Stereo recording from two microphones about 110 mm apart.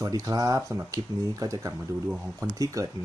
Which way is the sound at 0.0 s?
35° right (ahead or behind).